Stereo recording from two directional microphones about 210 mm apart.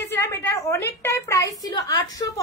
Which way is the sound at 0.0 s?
10° left (ahead or behind).